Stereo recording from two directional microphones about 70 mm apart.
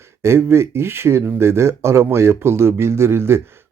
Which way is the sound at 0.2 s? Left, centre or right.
Right.